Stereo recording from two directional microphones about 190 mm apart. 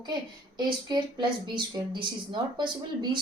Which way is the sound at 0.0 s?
25° right (ahead or behind).